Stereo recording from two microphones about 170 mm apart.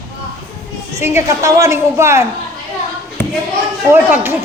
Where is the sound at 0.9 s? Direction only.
15° right (ahead or behind).